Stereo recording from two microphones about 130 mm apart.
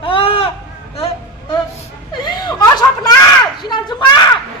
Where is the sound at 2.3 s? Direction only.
30° left (ahead or behind).